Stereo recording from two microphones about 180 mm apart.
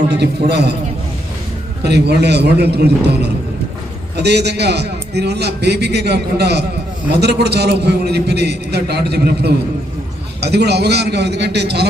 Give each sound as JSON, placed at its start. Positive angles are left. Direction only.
{"t": 0.1, "sound": "a man's voice", "side_deg": -65}
{"t": 1.8, "sound": "a man's voice", "side_deg": -65}